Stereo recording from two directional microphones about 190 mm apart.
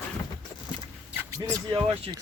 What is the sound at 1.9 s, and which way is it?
Speech, 30° right (ahead or behind).